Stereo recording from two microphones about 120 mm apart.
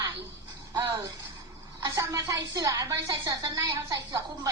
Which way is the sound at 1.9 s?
25° right (ahead or behind).